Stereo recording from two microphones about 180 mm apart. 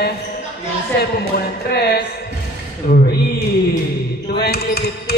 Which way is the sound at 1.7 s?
60° left (ahead or behind).